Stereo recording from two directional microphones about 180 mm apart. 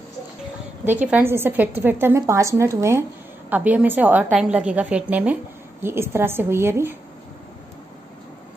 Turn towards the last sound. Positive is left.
turn(degrees=-15)  # may be behind; listen again after turning